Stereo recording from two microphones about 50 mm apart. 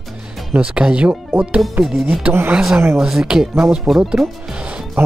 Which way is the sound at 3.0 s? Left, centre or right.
Centre.